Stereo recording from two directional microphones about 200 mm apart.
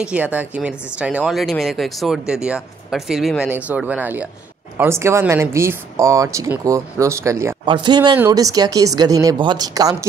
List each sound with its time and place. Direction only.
0.0 s speech: 5° right (ahead or behind)